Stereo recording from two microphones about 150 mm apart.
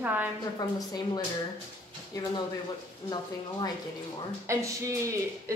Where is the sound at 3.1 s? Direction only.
30° left (ahead or behind).